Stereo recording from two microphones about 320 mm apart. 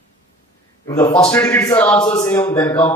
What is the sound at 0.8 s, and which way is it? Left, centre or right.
A man's voice, centre.